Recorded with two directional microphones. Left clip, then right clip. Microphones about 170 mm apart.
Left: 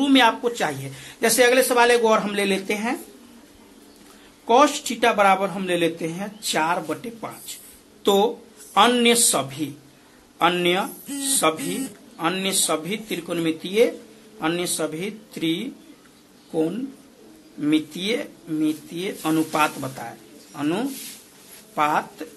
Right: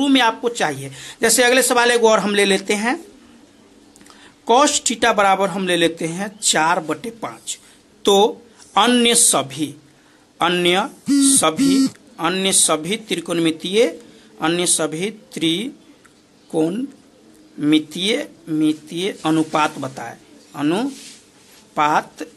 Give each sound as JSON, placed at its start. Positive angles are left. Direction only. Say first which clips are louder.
{"t": 0.0, "sound": "speech", "louder": "right 1 dB", "side_deg": -30}
{"t": 4.5, "sound": "speech", "louder": "right 2 dB", "side_deg": -45}